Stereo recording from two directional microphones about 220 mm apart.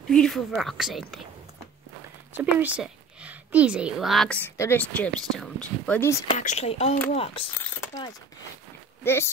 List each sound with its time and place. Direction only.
0.1 s a woman's voice: centre (ahead or behind)
2.3 s a woman's voice: 5° right (ahead or behind); by 6.2 s 10° left (ahead or behind)
6.3 s speech: 30° left (ahead or behind)
7.6 s a sound: 10° left (ahead or behind)
9.0 s speech: 10° left (ahead or behind)